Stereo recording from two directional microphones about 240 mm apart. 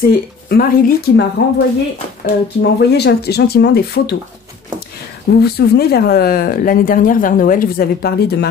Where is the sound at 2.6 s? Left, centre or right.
Left.